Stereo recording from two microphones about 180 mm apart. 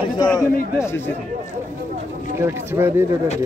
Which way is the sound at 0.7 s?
15° left (ahead or behind).